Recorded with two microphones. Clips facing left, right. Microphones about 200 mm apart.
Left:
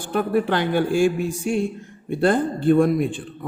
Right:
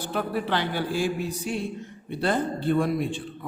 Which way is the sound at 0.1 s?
50° left (ahead or behind).